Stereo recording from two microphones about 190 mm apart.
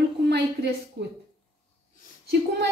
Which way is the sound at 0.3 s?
60° right (ahead or behind).